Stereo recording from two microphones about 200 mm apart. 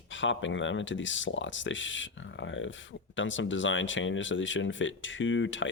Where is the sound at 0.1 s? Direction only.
70° left (ahead or behind).